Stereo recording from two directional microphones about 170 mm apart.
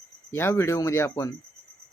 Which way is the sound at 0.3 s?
15° left (ahead or behind).